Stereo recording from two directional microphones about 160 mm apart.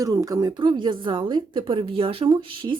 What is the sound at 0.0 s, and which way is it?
A woman's voice, 20° right (ahead or behind).